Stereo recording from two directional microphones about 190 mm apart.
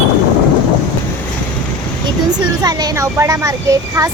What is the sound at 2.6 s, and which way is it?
Speech, 20° right (ahead or behind).